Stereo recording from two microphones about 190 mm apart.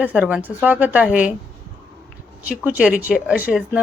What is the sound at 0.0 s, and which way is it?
Speech, 5° right (ahead or behind).